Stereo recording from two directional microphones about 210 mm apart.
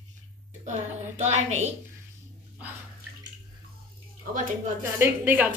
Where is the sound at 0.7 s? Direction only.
35° right (ahead or behind).